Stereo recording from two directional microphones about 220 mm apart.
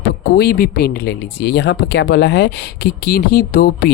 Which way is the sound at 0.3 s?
45° left (ahead or behind).